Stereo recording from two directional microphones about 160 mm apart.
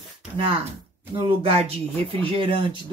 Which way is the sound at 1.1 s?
35° right (ahead or behind).